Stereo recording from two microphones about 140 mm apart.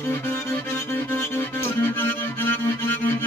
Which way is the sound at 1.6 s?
15° left (ahead or behind).